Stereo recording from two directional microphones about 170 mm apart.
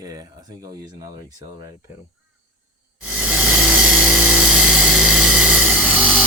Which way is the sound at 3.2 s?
5° right (ahead or behind).